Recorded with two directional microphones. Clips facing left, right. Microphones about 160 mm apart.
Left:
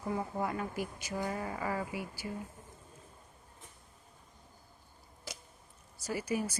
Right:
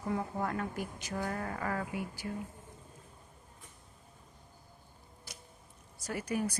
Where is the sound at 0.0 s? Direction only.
5° left (ahead or behind).